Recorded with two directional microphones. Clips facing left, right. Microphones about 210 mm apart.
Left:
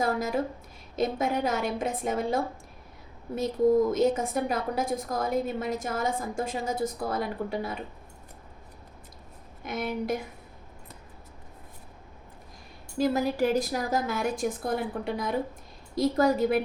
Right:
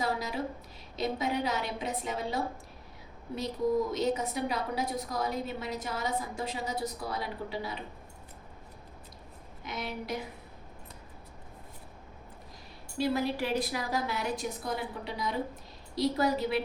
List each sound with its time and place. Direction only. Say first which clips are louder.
0.0 s a woman's voice: left 5 dB; 50° left (ahead or behind)
3.9 s a woman's voice: left 5 dB; 50° left (ahead or behind)
9.6 s a woman's voice: left 7 dB; 50° left (ahead or behind)
13.0 s a woman's voice: left 5 dB; 45° left (ahead or behind)